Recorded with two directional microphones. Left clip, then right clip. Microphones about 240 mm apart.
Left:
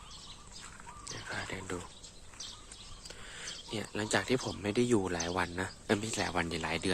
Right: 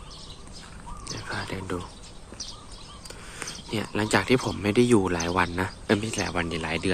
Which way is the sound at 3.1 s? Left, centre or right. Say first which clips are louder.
Right 6 dB; centre.